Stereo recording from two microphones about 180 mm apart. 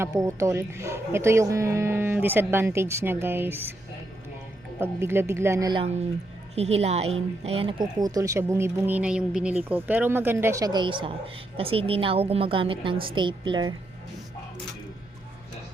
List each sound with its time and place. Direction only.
0.0 s speech: 15° right (ahead or behind)
4.8 s speech: 10° right (ahead or behind)
6.6 s a woman's voice: 35° right (ahead or behind)